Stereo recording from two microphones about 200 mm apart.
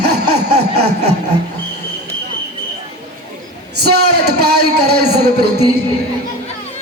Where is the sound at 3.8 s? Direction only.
55° right (ahead or behind).